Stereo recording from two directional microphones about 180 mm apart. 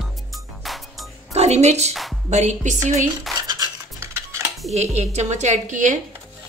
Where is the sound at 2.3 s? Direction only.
40° right (ahead or behind).